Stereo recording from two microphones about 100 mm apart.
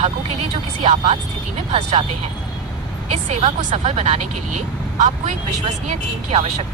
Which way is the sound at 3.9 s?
90° right.